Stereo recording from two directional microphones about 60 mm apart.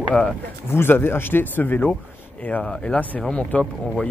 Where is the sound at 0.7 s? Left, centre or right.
Left.